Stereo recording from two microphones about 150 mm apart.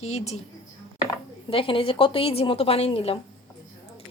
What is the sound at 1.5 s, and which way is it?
A woman's voice, 35° left (ahead or behind).